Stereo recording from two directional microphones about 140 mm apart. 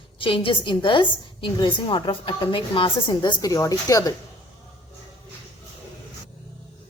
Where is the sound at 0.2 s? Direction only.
40° left (ahead or behind).